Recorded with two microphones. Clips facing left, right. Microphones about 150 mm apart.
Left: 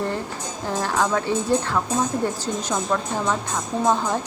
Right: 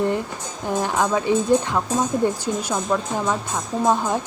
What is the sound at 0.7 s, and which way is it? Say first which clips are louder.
Speech: right 2 dB; 15° right (ahead or behind).